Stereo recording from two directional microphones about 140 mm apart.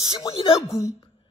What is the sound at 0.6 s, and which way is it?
Speech, 20° left (ahead or behind).